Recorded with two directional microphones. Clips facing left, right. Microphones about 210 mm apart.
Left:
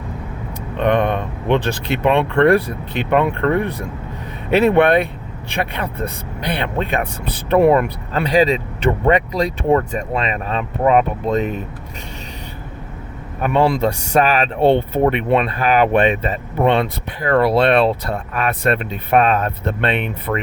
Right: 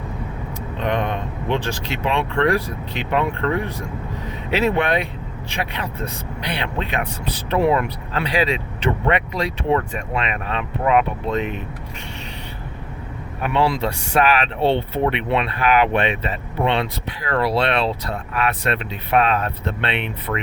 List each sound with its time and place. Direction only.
0.8 s speech: 60° left (ahead or behind); by 11.6 s 40° left (ahead or behind)
13.4 s speech: 45° left (ahead or behind)